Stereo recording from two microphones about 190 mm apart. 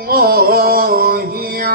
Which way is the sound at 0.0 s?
50° right (ahead or behind).